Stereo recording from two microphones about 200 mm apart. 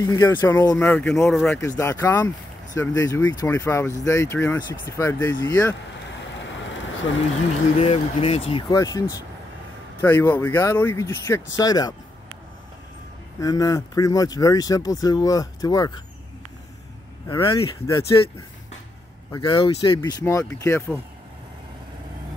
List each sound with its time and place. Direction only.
0.0 s speech: 15° left (ahead or behind); by 1.6 s centre (ahead or behind)
1.8 s speech: 10° left (ahead or behind)
6.3 s vehicle: 65° left (ahead or behind)
7.8 s speech: 30° left (ahead or behind)
10.0 s speech: 10° left (ahead or behind)
13.4 s speech: 15° left (ahead or behind)
17.3 s speech: 20° left (ahead or behind)
19.3 s speech: 25° left (ahead or behind)